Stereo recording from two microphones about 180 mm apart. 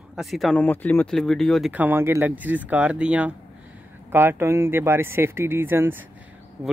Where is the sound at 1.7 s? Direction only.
10° right (ahead or behind).